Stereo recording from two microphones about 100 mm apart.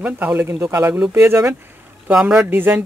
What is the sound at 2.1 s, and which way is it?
Speech, 10° right (ahead or behind).